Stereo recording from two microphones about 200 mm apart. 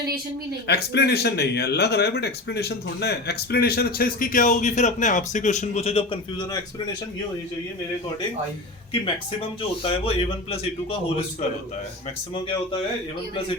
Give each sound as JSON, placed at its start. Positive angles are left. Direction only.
{"t": 0.7, "sound": "speech", "side_deg": 55}
{"t": 9.8, "sound": "a man's voice", "side_deg": 30}